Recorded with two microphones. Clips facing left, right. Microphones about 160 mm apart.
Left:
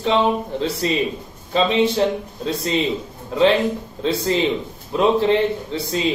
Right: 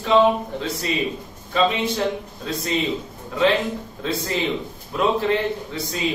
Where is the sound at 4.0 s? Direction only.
30° left (ahead or behind).